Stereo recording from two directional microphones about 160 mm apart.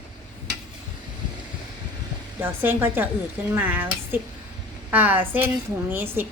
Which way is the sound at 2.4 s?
15° right (ahead or behind).